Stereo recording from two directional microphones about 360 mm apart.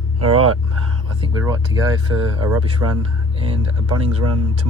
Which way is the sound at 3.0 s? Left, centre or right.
Centre.